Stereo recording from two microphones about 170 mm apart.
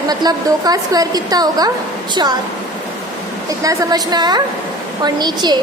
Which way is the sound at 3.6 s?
20° right (ahead or behind).